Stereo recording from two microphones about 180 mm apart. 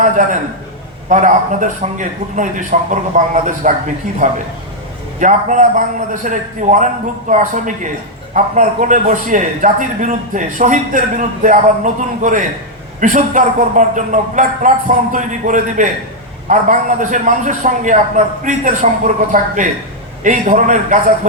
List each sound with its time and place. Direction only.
0.0 s a man's voice: 45° right (ahead or behind)